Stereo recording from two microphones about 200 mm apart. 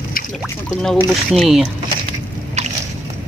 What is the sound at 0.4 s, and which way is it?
Speech, centre (ahead or behind).